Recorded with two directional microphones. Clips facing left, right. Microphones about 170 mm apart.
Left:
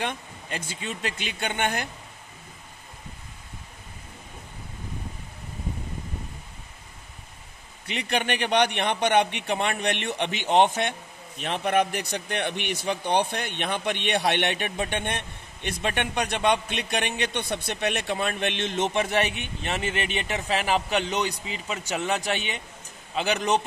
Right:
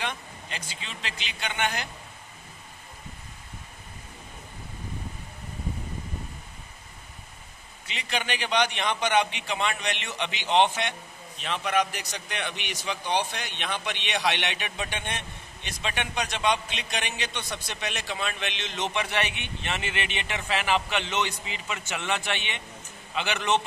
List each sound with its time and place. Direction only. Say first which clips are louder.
0.0 s speech: left 3 dB; 50° left (ahead or behind)
7.8 s a man's voice: left 5 dB; 60° left (ahead or behind); by 23.6 s 40° left (ahead or behind)